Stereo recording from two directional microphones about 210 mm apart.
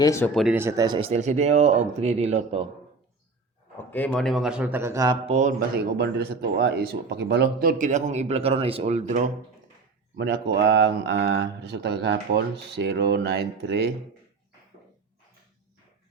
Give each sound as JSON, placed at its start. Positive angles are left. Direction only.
{"t": 0.0, "sound": "speech", "side_deg": 15}
{"t": 0.3, "sound": "speech", "side_deg": -5}
{"t": 3.9, "sound": "a man's voice", "side_deg": 5}
{"t": 5.2, "sound": "speech", "side_deg": -35}
{"t": 6.0, "sound": "speech", "side_deg": -50}
{"t": 10.2, "sound": "speech", "side_deg": -55}